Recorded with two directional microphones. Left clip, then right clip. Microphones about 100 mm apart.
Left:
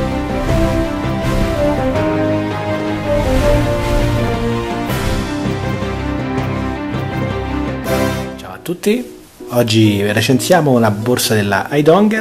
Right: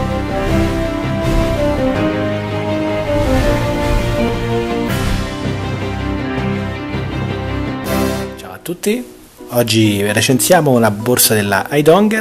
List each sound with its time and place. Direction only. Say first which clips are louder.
3.2 s music: left 4 dB; centre (ahead or behind)
9.6 s speech: even; 25° right (ahead or behind)